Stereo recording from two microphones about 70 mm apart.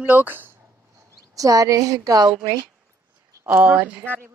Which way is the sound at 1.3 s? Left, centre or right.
Right.